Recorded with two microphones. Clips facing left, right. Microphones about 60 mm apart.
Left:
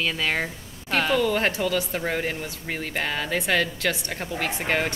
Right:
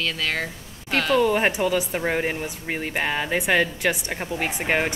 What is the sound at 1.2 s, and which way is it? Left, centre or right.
Speech, centre.